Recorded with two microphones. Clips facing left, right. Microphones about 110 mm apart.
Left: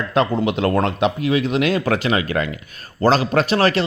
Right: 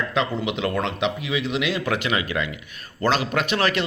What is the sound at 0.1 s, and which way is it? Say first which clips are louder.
A man's voice: left 6 dB; 45° left (ahead or behind).